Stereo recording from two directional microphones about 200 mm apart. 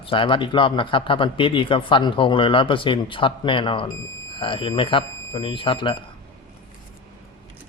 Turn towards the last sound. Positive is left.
turn(degrees=25)  # may be behind; listen again after turning